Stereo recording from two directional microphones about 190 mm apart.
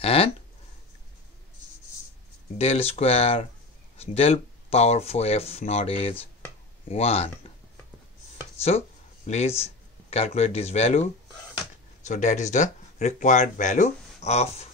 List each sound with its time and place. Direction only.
0.0 s speech: 30° left (ahead or behind)
2.5 s speech: 35° left (ahead or behind)
8.6 s a sound: 35° left (ahead or behind)
9.6 s speech: 30° left (ahead or behind)